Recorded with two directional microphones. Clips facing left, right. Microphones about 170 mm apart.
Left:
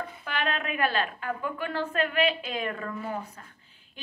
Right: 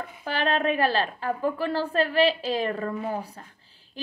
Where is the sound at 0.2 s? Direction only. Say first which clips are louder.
Right 7 dB; 35° right (ahead or behind).